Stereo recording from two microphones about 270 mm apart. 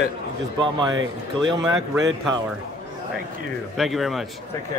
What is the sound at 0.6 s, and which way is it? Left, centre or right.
Speech, centre.